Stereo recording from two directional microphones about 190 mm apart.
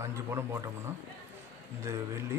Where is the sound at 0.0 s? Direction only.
15° right (ahead or behind).